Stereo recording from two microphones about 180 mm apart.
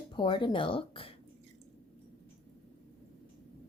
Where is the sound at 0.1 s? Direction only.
25° left (ahead or behind).